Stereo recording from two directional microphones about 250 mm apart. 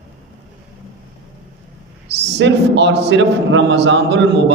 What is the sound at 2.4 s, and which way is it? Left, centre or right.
A man's voice, right.